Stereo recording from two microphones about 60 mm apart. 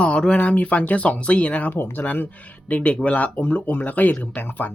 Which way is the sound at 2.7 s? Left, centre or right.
Left.